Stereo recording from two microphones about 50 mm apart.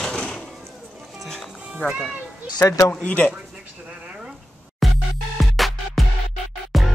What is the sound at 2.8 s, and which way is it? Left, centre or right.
Speech, left.